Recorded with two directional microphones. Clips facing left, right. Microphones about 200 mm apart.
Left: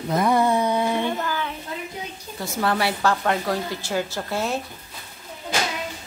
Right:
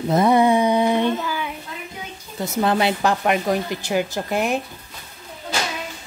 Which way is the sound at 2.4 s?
20° right (ahead or behind).